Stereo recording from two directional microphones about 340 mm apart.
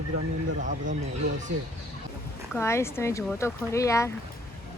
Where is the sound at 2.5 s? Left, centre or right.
Centre.